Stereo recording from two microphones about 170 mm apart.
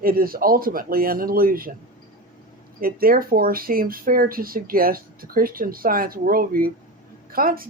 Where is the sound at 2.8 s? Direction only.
60° right (ahead or behind).